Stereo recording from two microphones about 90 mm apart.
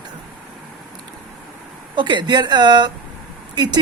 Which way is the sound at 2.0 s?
60° right (ahead or behind).